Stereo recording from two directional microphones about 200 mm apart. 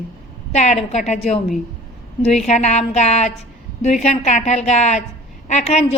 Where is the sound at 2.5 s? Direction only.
35° left (ahead or behind).